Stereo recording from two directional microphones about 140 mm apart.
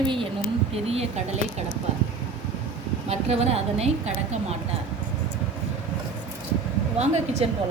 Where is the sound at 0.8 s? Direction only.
50° right (ahead or behind).